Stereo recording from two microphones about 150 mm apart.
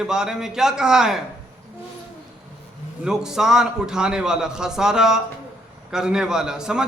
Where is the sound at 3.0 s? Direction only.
5° right (ahead or behind).